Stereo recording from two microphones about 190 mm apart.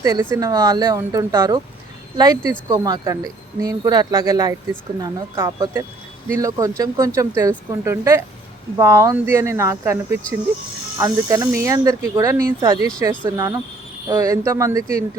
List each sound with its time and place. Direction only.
0.0 s speech: 20° right (ahead or behind)